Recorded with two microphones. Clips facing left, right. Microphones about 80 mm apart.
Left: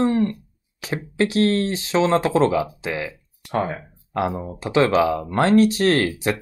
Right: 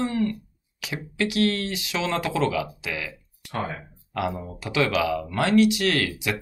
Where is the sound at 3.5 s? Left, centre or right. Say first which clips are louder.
Left 6 dB; left.